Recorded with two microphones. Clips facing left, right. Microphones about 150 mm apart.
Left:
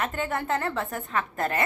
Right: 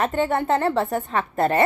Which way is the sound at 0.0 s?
30° right (ahead or behind).